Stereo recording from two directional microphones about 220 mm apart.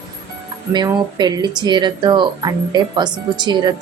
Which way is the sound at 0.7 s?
20° right (ahead or behind).